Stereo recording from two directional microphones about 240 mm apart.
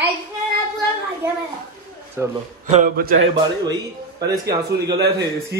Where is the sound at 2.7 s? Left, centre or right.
Right.